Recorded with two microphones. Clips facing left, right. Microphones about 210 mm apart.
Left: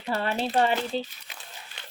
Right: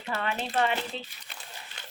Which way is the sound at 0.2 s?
35° left (ahead or behind).